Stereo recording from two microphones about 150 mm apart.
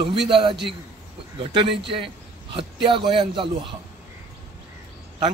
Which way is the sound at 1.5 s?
35° right (ahead or behind).